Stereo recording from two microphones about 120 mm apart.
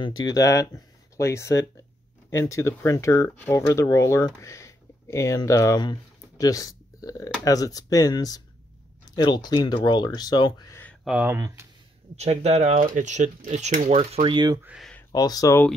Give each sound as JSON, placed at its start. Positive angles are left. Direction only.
{"t": 0.0, "sound": "speech", "side_deg": 35}
{"t": 11.2, "sound": "speech", "side_deg": -20}
{"t": 12.2, "sound": "speech", "side_deg": -65}
{"t": 14.2, "sound": "speech", "side_deg": -40}
{"t": 15.1, "sound": "speech", "side_deg": 35}